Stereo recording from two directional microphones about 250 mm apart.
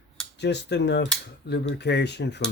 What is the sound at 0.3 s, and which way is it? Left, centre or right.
Speech, left.